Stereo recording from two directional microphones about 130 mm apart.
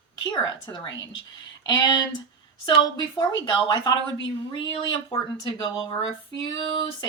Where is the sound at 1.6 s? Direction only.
35° left (ahead or behind).